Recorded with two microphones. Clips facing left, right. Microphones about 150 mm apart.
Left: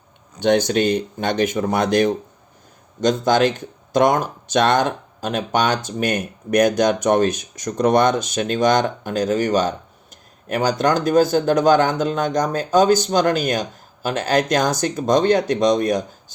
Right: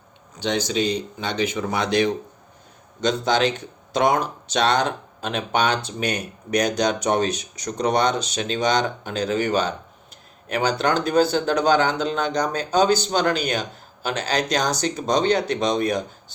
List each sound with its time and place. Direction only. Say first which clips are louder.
0.3 s speech: left 6 dB; 55° left (ahead or behind)